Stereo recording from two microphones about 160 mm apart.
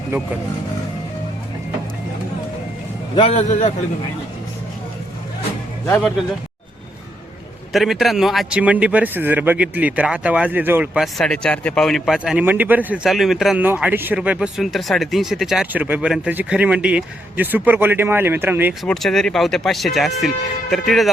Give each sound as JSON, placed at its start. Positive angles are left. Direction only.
{"t": 3.2, "sound": "a man's voice", "side_deg": 40}
{"t": 5.8, "sound": "speech", "side_deg": 10}
{"t": 7.7, "sound": "speech", "side_deg": 0}
{"t": 11.0, "sound": "a man's voice", "side_deg": 5}
{"t": 18.9, "sound": "a man's voice", "side_deg": 5}